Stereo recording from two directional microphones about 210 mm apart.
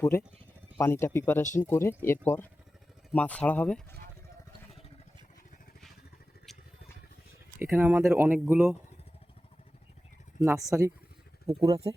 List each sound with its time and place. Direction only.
0.0 s speech: 10° left (ahead or behind)
7.6 s speech: 10° right (ahead or behind)
10.4 s speech: centre (ahead or behind)
10.7 s speech: 15° right (ahead or behind)